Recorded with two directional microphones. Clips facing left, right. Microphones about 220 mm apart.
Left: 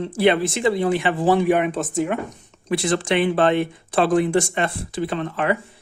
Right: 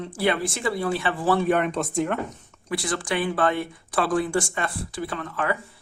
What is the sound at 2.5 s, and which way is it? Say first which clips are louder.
Speech: left 9 dB; 20° left (ahead or behind).